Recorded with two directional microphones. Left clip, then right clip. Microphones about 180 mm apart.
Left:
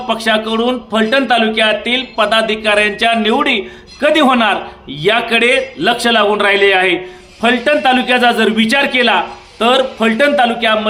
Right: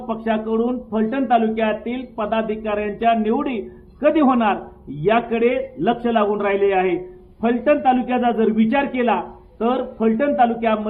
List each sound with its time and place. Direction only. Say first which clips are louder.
0.1 s a man's voice: left 8 dB; 25° left (ahead or behind)